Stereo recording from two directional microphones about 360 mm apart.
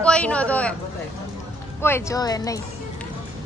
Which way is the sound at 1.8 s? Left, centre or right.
Centre.